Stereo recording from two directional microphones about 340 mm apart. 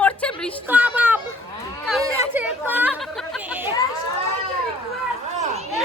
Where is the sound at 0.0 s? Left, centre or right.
Centre.